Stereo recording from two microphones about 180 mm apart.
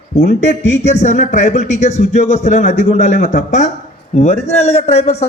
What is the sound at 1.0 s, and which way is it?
A man's voice, 40° left (ahead or behind).